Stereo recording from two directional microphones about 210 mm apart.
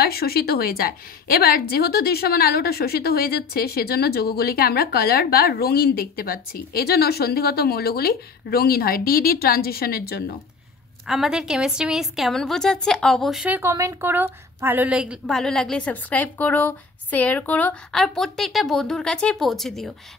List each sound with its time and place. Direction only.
0.0 s a woman's voice: 45° left (ahead or behind)
11.1 s a woman's voice: centre (ahead or behind)